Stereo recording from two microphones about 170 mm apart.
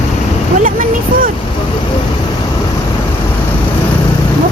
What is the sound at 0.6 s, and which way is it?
Speech, 55° right (ahead or behind).